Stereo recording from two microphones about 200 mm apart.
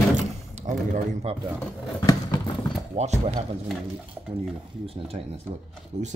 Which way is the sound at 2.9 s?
35° right (ahead or behind).